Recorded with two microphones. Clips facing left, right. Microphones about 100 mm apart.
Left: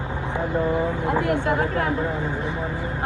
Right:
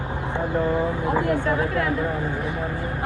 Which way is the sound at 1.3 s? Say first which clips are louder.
Even; 20° left (ahead or behind).